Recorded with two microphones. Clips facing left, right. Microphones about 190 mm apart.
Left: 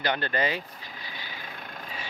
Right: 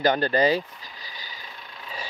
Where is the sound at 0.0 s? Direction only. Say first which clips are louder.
Right 7 dB; 40° right (ahead or behind).